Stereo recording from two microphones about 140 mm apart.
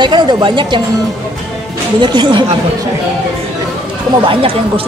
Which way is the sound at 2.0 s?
35° right (ahead or behind).